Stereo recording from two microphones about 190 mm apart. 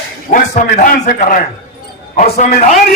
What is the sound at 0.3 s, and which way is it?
A man's voice, 40° left (ahead or behind).